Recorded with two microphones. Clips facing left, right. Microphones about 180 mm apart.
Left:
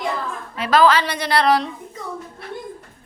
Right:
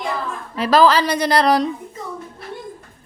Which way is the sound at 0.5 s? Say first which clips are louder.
Right 2 dB; 35° right (ahead or behind).